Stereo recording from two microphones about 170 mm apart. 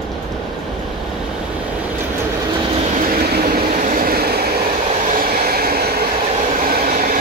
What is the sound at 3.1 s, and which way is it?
Train, 60° right (ahead or behind).